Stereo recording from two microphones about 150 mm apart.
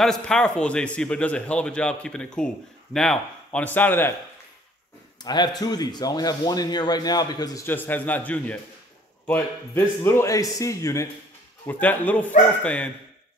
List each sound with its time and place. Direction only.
0.0 s a man's voice: 5° left (ahead or behind)
5.2 s speech: 30° left (ahead or behind)
7.6 s a man's voice: 15° left (ahead or behind)